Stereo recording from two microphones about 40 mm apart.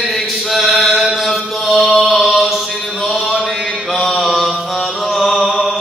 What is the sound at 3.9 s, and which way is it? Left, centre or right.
Mantra, centre.